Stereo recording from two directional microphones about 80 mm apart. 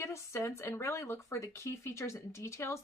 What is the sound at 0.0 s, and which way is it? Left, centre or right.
Speech, left.